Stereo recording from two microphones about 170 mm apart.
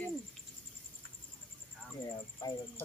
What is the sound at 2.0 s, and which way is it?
Speech, 20° left (ahead or behind).